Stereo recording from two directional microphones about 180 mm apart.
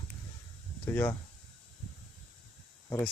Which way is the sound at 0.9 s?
15° left (ahead or behind).